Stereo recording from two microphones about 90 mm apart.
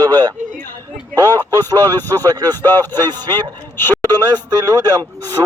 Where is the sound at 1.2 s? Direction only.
25° left (ahead or behind).